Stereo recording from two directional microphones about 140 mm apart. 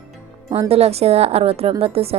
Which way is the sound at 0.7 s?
45° right (ahead or behind).